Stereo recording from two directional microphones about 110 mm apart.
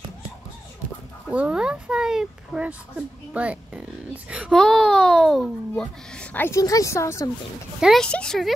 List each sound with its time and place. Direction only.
1.3 s speech: 10° right (ahead or behind)
4.5 s a child's voice: 5° left (ahead or behind)
6.5 s a woman's voice: 30° left (ahead or behind)
7.8 s a child's voice: 5° left (ahead or behind)